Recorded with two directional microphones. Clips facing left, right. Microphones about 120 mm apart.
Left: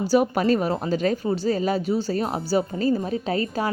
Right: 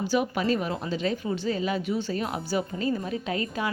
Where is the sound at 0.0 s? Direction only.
40° left (ahead or behind).